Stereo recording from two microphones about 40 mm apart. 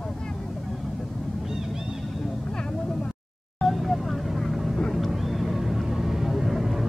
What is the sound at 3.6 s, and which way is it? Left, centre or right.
Vehicle, centre.